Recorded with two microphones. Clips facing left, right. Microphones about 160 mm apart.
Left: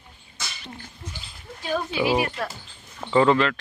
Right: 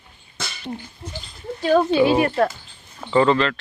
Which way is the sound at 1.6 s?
75° right (ahead or behind).